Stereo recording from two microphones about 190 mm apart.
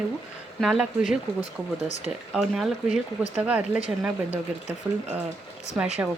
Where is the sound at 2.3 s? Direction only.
Centre (ahead or behind).